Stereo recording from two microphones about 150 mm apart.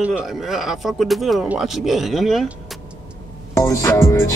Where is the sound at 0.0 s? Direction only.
5° right (ahead or behind).